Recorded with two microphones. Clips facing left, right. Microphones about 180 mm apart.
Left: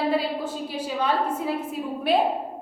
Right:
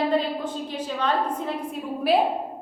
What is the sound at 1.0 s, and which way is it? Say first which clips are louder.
Speech: left 1 dB; 10° left (ahead or behind).